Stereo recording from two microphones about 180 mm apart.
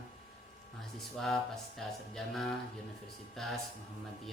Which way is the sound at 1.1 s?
Centre (ahead or behind).